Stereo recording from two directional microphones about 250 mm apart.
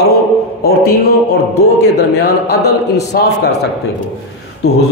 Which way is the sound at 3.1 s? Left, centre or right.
Left.